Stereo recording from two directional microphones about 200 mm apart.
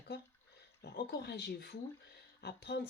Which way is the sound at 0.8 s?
55° left (ahead or behind).